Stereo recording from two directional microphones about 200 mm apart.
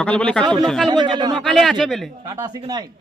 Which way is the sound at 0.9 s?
20° right (ahead or behind).